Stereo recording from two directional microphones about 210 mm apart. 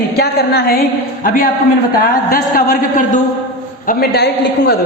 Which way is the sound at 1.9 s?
45° left (ahead or behind).